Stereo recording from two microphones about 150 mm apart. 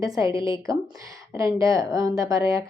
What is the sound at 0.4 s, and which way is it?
A woman's voice, 20° right (ahead or behind).